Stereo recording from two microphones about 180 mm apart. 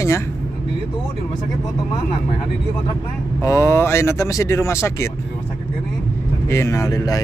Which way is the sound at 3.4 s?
15° left (ahead or behind).